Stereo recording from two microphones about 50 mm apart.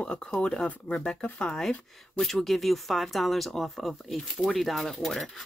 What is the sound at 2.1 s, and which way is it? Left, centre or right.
Speech, centre.